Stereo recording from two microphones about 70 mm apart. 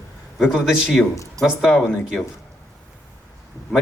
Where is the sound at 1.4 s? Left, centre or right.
Right.